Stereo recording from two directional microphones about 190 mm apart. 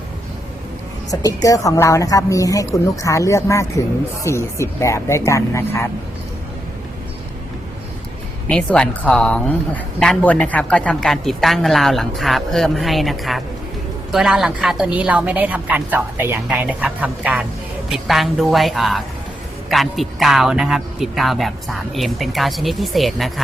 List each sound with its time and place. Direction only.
1.2 s a woman's voice: 20° left (ahead or behind)
8.4 s a woman's voice: 5° left (ahead or behind)